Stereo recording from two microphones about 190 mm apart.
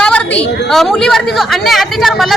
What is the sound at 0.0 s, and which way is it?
A woman's voice, 5° left (ahead or behind).